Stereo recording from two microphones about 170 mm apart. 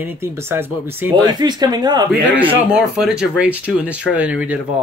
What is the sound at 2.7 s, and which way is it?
Speech, 5° right (ahead or behind).